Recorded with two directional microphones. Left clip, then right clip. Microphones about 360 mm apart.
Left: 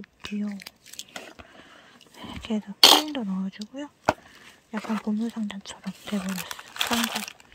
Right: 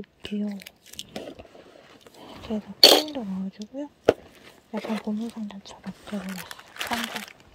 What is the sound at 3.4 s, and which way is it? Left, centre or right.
Speech, centre.